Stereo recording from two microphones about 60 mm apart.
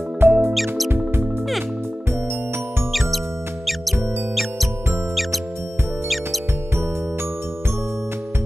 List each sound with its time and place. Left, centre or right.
0.2 s music: right
0.6 s music: centre